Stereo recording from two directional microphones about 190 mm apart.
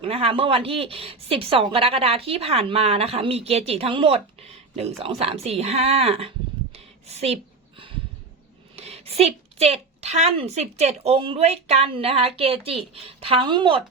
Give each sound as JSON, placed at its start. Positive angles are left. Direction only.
{"t": 0.0, "sound": "speech", "side_deg": -30}
{"t": 6.7, "sound": "a sound", "side_deg": -35}
{"t": 8.7, "sound": "speech", "side_deg": -35}